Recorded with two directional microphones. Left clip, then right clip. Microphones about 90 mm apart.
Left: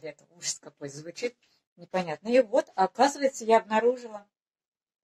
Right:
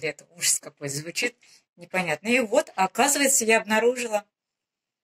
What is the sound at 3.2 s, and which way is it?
Speech, 40° right (ahead or behind).